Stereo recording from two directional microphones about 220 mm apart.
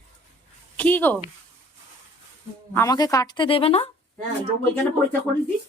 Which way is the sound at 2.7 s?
15° left (ahead or behind).